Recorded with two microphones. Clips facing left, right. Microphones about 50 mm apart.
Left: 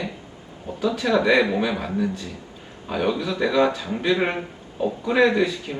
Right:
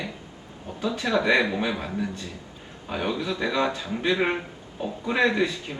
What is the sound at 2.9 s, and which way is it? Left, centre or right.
A man's voice, centre.